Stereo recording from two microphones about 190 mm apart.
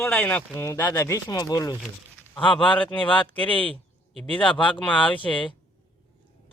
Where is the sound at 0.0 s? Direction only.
10° left (ahead or behind); by 3.2 s 25° left (ahead or behind).